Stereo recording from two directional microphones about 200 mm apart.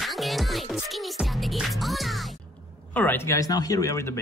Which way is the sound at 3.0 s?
10° left (ahead or behind).